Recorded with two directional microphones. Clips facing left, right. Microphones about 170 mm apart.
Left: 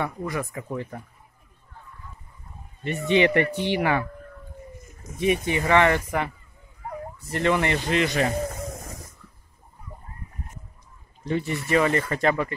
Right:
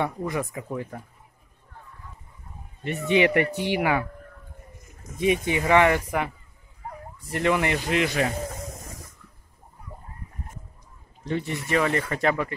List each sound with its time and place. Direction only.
0.0 s speech: 20° right (ahead or behind)
0.7 s speech: 5° right (ahead or behind)
2.8 s speech: 5° right (ahead or behind)
5.1 s speech: 15° right (ahead or behind)
11.2 s speech: 5° left (ahead or behind)